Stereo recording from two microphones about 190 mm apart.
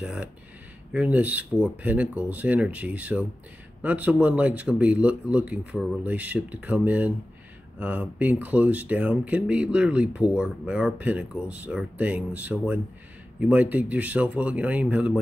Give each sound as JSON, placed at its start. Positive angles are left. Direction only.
{"t": 0.0, "sound": "speech", "side_deg": -5}